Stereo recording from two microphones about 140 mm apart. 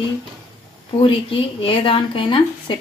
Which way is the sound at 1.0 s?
40° left (ahead or behind).